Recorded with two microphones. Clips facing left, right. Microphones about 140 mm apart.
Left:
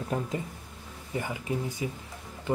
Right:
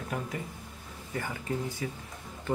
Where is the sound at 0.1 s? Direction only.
25° left (ahead or behind).